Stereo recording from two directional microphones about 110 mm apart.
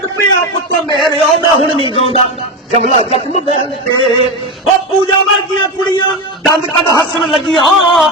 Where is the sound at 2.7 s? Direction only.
70° right (ahead or behind).